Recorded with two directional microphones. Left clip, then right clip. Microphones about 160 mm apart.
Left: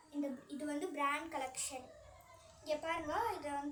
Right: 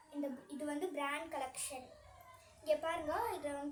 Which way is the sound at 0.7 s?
50° right (ahead or behind).